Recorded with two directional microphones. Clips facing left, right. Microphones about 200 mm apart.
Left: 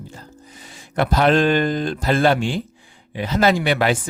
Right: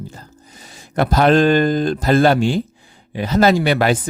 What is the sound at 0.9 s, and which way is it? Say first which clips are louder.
Speech: right 3 dB; 40° right (ahead or behind).